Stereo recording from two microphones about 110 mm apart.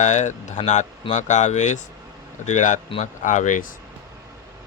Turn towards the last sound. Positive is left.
turn(degrees=90)